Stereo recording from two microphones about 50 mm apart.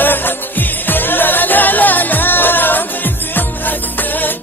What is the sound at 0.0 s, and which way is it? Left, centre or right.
Music, left.